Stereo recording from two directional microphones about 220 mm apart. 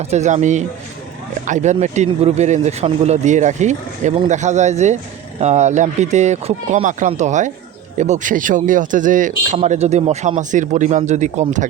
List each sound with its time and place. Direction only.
0.0 s speech: 30° right (ahead or behind)